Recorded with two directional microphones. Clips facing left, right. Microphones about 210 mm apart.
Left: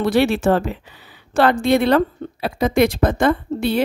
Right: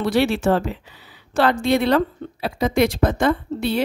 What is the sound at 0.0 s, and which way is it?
A woman's voice, 55° left (ahead or behind).